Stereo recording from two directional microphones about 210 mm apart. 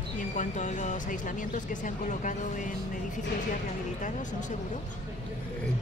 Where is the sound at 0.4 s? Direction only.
35° left (ahead or behind).